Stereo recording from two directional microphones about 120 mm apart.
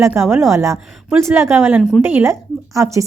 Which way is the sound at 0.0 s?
20° right (ahead or behind).